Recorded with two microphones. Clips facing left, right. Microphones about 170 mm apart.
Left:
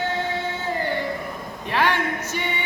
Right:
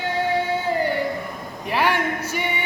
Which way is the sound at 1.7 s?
10° right (ahead or behind).